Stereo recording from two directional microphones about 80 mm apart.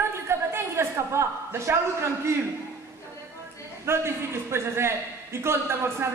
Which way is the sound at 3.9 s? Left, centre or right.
Right.